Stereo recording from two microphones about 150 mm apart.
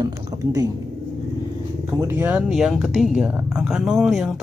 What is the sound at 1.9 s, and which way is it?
Speech, 20° right (ahead or behind).